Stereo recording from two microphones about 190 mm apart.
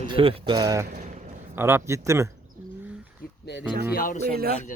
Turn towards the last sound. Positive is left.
turn(degrees=-55)  # may be behind; listen again after turning